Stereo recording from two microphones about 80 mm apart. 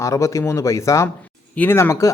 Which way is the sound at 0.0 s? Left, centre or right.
Left.